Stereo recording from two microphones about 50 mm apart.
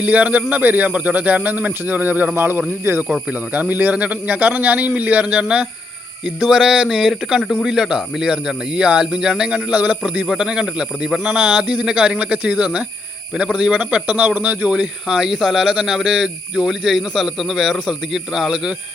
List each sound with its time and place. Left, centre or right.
0.0 s a man's voice: right
2.3 s speech: right
2.9 s speech: right
3.2 s a man's voice: right; by 9.6 s centre
9.7 s a man's voice: right
10.0 s speech: right
11.1 s speech: centre
11.3 s a man's voice: centre
14.7 s speech: centre